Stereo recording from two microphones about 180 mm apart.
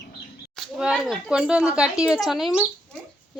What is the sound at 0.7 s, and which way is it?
A woman's voice, 5° right (ahead or behind).